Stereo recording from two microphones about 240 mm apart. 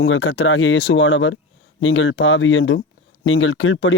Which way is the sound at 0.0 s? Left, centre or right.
Left.